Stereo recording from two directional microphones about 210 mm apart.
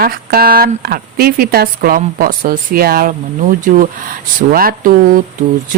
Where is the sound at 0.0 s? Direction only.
45° right (ahead or behind).